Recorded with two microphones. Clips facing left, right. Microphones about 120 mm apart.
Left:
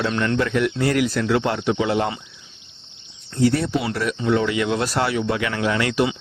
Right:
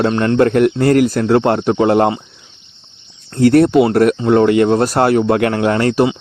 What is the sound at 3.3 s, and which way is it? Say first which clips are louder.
Speech: right 10 dB; 60° right (ahead or behind).